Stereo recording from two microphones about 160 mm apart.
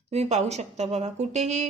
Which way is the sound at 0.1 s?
45° right (ahead or behind).